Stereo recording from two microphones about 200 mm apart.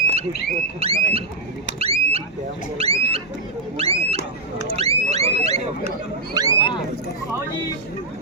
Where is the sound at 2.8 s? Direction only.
30° right (ahead or behind).